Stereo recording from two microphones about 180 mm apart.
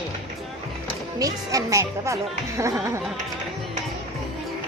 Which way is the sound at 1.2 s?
20° right (ahead or behind).